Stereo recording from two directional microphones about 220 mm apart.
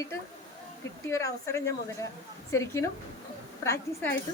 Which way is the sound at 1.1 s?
15° left (ahead or behind).